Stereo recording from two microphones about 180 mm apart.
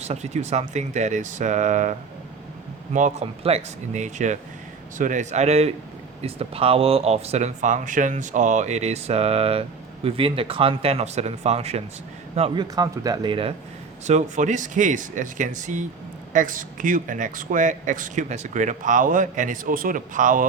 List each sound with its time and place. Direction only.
0.0 s speech: 40° right (ahead or behind)
12.4 s speech: 25° right (ahead or behind)
14.1 s speech: 40° right (ahead or behind)